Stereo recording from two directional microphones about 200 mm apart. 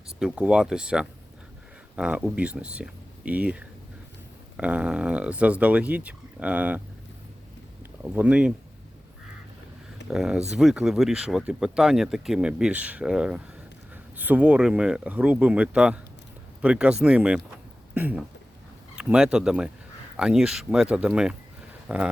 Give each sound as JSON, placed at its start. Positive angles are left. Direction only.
{"t": 0.2, "sound": "speech", "side_deg": -5}
{"t": 8.1, "sound": "speech", "side_deg": -5}
{"t": 10.1, "sound": "speech", "side_deg": -5}